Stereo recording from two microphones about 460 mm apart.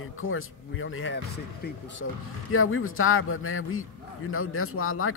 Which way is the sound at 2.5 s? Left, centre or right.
Left.